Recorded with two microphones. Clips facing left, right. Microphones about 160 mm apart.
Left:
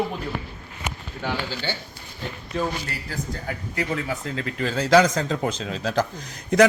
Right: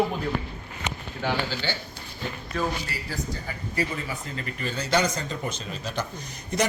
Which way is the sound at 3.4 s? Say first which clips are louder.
Left 3 dB; 70° left (ahead or behind).